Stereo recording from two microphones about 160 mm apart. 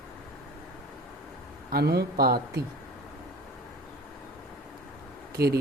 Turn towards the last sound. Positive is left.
turn(degrees=-80)